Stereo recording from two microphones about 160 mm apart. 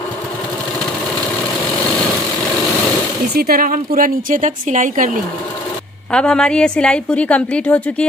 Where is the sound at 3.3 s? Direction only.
65° right (ahead or behind).